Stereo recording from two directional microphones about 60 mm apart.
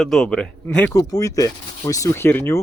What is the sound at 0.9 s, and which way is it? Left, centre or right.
Speech, left.